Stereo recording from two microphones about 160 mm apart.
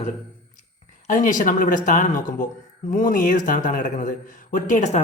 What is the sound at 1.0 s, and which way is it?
A man's voice, 55° left (ahead or behind).